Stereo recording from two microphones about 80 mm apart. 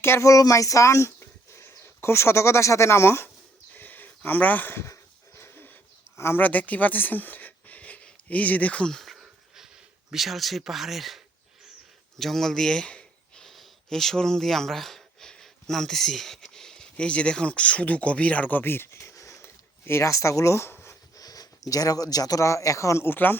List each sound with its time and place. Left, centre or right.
0.0 s speech: left
3.8 s a sound: left
6.1 s speech: left
6.4 s speech: centre
9.1 s a sound: centre
10.1 s speech: centre
12.2 s speech: centre; by 20.9 s left
21.2 s a sound: left
21.7 s speech: left
23.0 s speech: left